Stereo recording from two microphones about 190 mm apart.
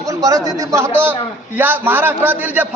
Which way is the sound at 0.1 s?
15° right (ahead or behind).